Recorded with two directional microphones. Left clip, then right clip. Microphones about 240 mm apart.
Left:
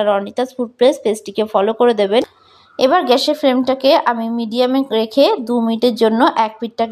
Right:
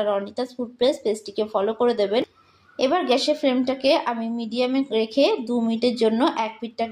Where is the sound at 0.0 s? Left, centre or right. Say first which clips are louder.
Left 8 dB; left.